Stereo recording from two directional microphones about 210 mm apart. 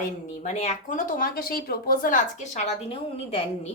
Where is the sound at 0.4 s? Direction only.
35° left (ahead or behind).